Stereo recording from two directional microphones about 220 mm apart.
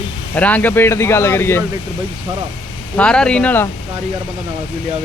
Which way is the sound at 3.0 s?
5° left (ahead or behind).